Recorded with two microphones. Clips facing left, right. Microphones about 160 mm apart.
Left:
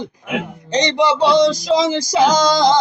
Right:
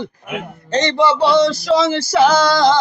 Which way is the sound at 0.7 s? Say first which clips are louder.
Right 1 dB; 15° left (ahead or behind).